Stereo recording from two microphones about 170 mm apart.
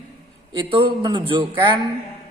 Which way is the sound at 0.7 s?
30° right (ahead or behind).